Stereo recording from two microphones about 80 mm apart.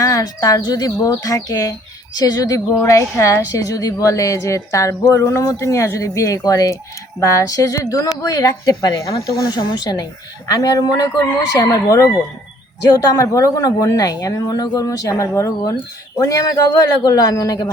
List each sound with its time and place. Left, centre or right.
0.0 s a woman's voice: left
9.6 s speech: left
10.5 s a woman's voice: left